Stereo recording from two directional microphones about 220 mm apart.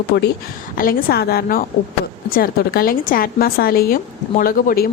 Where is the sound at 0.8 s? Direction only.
45° left (ahead or behind).